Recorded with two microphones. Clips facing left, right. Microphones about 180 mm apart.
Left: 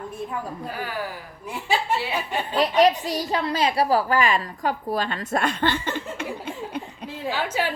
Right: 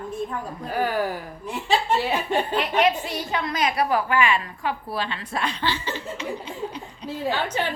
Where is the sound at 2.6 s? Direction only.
35° left (ahead or behind); by 6.2 s 55° left (ahead or behind).